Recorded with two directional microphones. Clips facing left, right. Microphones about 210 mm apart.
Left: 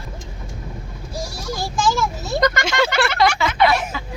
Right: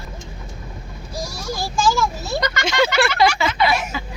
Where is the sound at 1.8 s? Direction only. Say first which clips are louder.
Right 1 dB; 20° left (ahead or behind).